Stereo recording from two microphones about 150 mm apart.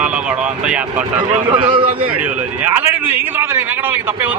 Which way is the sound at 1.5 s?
35° right (ahead or behind).